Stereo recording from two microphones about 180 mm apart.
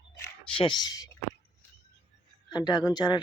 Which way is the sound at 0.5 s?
25° left (ahead or behind).